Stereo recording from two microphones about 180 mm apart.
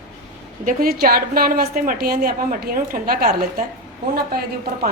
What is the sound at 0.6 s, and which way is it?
A woman's voice, 55° right (ahead or behind).